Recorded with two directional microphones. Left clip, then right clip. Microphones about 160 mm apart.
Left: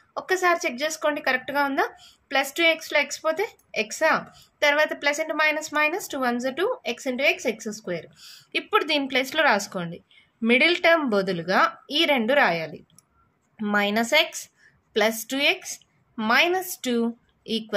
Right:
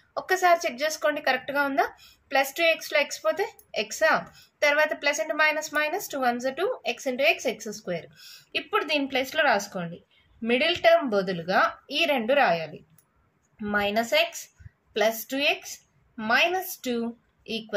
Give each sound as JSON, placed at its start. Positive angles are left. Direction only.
{"t": 0.1, "sound": "a woman's voice", "side_deg": 30}